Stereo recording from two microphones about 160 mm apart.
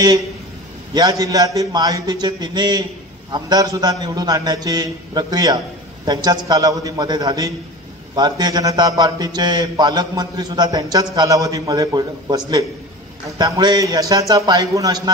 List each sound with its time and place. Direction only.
0.9 s a man's voice: 25° right (ahead or behind)
13.4 s a man's voice: 25° right (ahead or behind)